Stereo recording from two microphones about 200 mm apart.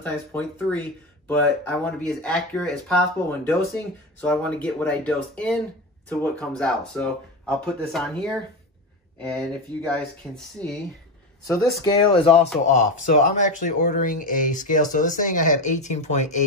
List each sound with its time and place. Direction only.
0.0 s speech: 10° left (ahead or behind)
9.9 s speech: 10° left (ahead or behind)
12.1 s speech: 30° left (ahead or behind)